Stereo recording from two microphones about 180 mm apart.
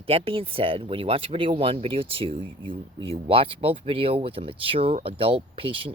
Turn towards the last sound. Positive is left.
turn(degrees=-30)  # may be behind; listen again after turning